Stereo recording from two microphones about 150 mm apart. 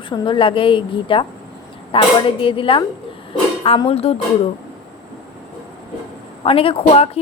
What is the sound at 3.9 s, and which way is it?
Speech, 40° left (ahead or behind).